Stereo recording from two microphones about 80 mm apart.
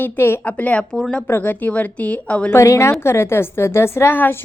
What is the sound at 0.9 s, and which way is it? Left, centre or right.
Speech, centre.